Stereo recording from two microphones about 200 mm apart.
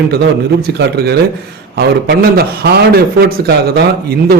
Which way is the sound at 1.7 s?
55° right (ahead or behind).